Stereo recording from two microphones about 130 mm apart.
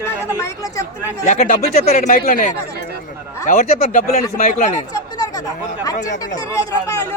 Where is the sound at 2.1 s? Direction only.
85° left.